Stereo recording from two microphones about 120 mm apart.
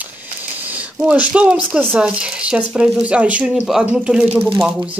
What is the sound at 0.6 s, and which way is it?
Speech, 10° right (ahead or behind).